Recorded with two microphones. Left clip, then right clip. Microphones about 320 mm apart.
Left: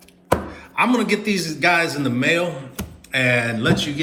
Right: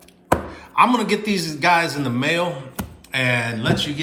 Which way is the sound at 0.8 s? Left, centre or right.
Centre.